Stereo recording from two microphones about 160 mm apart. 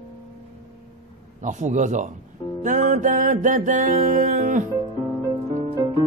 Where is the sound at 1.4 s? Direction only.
50° right (ahead or behind).